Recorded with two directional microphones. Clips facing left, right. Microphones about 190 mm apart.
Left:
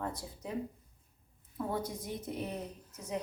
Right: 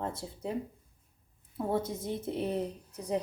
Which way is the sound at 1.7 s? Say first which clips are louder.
Right 6 dB; 25° right (ahead or behind).